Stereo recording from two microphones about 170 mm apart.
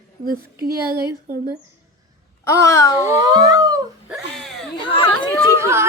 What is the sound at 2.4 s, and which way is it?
Speech, 15° left (ahead or behind).